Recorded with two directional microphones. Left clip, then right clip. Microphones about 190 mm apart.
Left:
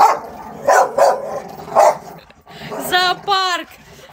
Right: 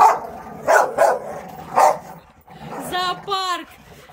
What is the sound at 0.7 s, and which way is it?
Dog, 20° left (ahead or behind).